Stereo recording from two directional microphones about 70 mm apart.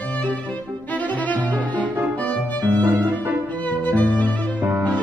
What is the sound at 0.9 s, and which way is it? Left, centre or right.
Music, left.